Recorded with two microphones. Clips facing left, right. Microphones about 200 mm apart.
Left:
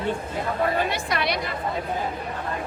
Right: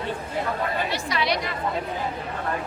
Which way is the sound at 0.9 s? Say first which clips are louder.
Even; 55° left (ahead or behind).